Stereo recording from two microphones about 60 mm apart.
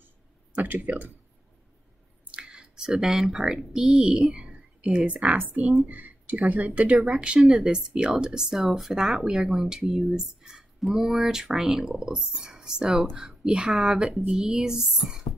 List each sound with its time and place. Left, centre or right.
0.6 s speech: right
2.3 s speech: centre
7.0 s speech: centre